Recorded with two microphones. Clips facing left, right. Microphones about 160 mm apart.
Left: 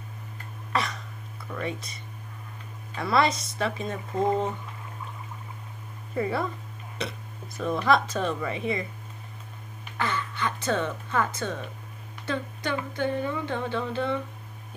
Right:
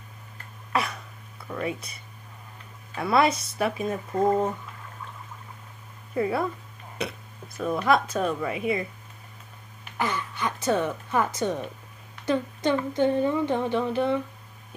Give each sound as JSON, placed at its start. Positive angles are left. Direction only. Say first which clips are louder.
{"t": 1.5, "sound": "speech", "louder": "right 2 dB", "side_deg": -5}
{"t": 3.0, "sound": "speech", "louder": "right 2 dB", "side_deg": -5}
{"t": 6.1, "sound": "speech", "louder": "right 2 dB", "side_deg": -10}
{"t": 7.5, "sound": "speech", "louder": "right 1 dB", "side_deg": -5}
{"t": 9.9, "sound": "speech", "louder": "right 1 dB", "side_deg": -15}